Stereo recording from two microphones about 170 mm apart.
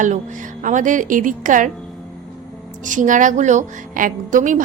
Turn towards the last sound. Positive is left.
turn(degrees=-50)  # may be behind; listen again after turning